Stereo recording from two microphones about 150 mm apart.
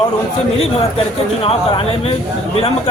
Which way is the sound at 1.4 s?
40° left (ahead or behind).